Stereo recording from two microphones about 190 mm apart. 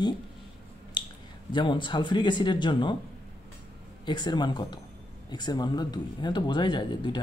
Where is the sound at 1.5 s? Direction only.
25° left (ahead or behind).